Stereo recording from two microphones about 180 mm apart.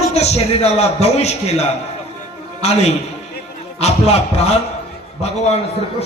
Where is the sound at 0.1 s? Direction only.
35° left (ahead or behind).